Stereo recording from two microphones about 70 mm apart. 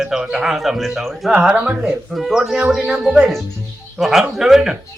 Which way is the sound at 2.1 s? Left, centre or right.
Centre.